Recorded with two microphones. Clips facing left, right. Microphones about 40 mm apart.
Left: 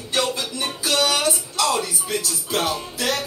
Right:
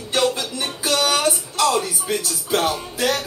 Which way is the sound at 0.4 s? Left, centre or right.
Right.